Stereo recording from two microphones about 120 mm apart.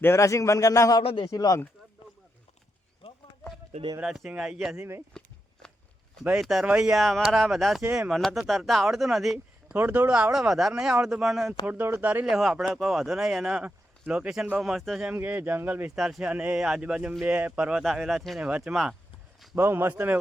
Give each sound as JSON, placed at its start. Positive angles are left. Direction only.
{"t": 0.0, "sound": "speech", "side_deg": 25}
{"t": 3.0, "sound": "a sound", "side_deg": 55}
{"t": 4.0, "sound": "speech", "side_deg": -5}
{"t": 5.2, "sound": "a sound", "side_deg": 5}
{"t": 6.2, "sound": "speech", "side_deg": -5}
{"t": 9.7, "sound": "speech", "side_deg": -15}
{"t": 11.6, "sound": "speech", "side_deg": -15}
{"t": 12.2, "sound": "speech", "side_deg": -5}
{"t": 15.1, "sound": "speech", "side_deg": -15}
{"t": 16.0, "sound": "speech", "side_deg": -5}
{"t": 19.5, "sound": "speech", "side_deg": -20}